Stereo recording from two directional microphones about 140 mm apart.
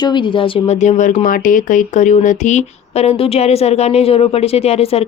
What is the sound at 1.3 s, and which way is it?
Speech, 75° left (ahead or behind).